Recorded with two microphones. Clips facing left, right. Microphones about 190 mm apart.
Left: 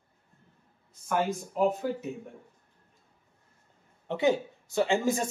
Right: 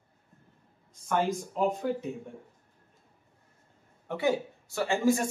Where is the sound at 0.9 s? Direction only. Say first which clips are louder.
Right 1 dB; 5° left (ahead or behind).